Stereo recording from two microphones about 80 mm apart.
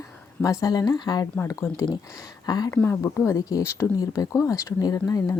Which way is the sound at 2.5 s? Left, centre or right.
Left.